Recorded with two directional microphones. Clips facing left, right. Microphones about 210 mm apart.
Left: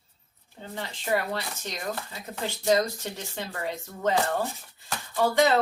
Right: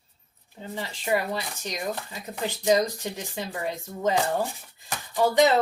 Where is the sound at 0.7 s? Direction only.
15° right (ahead or behind).